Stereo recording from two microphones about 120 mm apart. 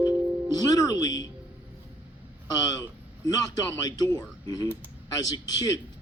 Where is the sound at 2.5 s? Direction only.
30° left (ahead or behind).